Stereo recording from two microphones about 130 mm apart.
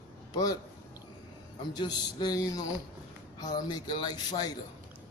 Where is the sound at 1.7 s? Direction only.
35° left (ahead or behind).